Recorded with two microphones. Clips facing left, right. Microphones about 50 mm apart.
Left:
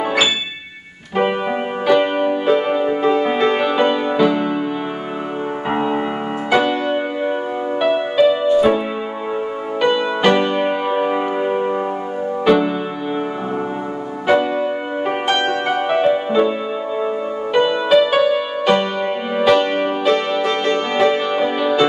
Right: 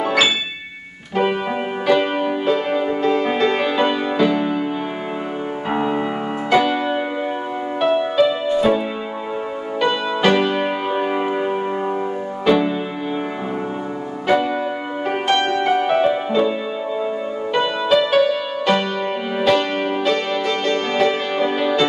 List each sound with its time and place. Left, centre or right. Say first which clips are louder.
0.0 s music: even; centre
1.9 s music: left 3 dB; centre
5.7 s music: left 1 dB; centre
14.2 s music: left 2 dB; centre
17.6 s music: left 4 dB; centre